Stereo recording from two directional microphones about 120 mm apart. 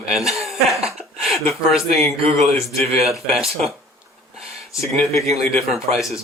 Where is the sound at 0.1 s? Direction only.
Centre (ahead or behind).